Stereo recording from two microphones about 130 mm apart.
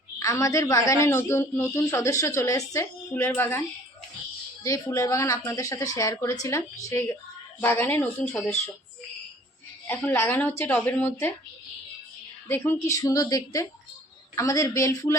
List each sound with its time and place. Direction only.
0.2 s a woman's voice: 25° left (ahead or behind)
4.6 s a woman's voice: 25° left (ahead or behind)
8.2 s speech: 5° left (ahead or behind)
10.0 s speech: 15° left (ahead or behind)
12.5 s a woman's voice: 15° left (ahead or behind)